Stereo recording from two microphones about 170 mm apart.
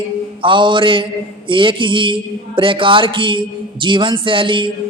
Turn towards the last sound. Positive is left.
turn(degrees=-30)  # may be behind; listen again after turning